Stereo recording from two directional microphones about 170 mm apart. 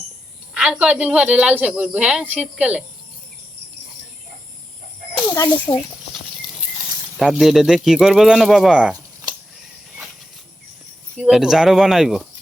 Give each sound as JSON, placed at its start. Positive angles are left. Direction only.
{"t": 0.5, "sound": "speech", "side_deg": -5}
{"t": 5.3, "sound": "speech", "side_deg": 20}
{"t": 7.2, "sound": "speech", "side_deg": 0}
{"t": 11.2, "sound": "speech", "side_deg": -5}